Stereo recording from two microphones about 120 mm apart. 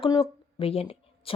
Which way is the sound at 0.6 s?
55° left (ahead or behind).